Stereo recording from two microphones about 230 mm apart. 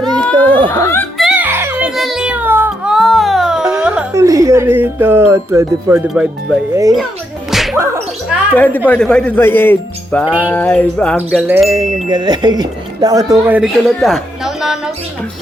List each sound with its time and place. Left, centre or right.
0.3 s a sound: right
0.7 s speech: centre
1.2 s music: centre
7.5 s whip: centre
8.5 s speech: centre
10.2 s speech: centre
10.5 s bird: centre
11.4 s speech: centre